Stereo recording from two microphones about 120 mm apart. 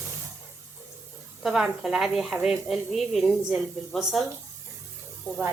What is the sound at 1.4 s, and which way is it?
Speech, 5° right (ahead or behind).